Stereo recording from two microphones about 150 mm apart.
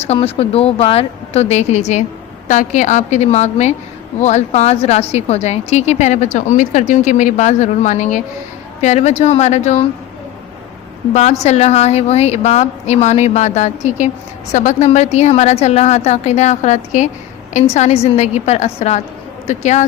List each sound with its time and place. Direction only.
0.0 s speech: 40° left (ahead or behind)
11.1 s speech: 50° left (ahead or behind)